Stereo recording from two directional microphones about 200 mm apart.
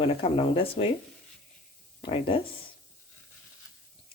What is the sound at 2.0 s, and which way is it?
Speech, 25° left (ahead or behind).